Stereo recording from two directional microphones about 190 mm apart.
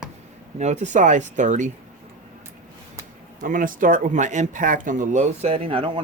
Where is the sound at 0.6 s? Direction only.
35° right (ahead or behind).